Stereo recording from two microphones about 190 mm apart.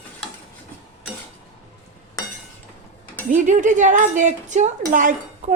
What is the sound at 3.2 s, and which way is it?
Speech, 40° right (ahead or behind).